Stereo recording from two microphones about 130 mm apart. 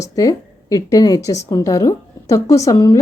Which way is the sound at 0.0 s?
25° left (ahead or behind).